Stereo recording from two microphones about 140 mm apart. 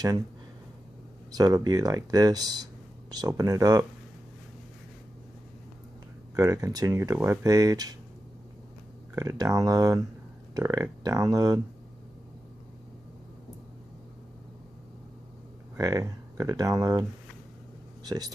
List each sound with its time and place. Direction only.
1.3 s speech: 25° right (ahead or behind)
6.3 s speech: 25° right (ahead or behind)
9.1 s speech: 25° right (ahead or behind)
15.8 s speech: 25° right (ahead or behind)
18.0 s speech: 25° right (ahead or behind)